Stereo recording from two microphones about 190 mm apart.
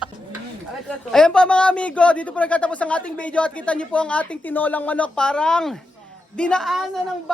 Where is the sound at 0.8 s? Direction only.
5° left (ahead or behind).